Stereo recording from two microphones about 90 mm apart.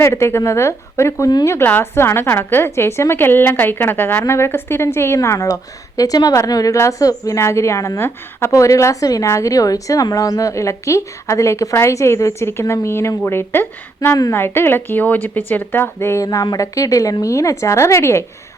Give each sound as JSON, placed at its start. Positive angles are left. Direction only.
{"t": 0.0, "sound": "a woman's voice", "side_deg": 30}
{"t": 16.2, "sound": "a woman's voice", "side_deg": 40}